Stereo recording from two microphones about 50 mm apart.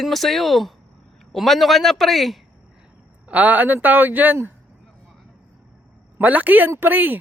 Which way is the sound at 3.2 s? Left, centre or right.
Right.